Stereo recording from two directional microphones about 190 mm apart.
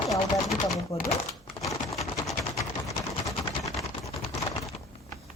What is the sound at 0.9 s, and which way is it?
Speech, 30° left (ahead or behind).